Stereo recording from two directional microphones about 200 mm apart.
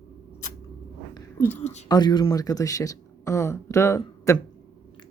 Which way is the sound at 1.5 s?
35° left (ahead or behind).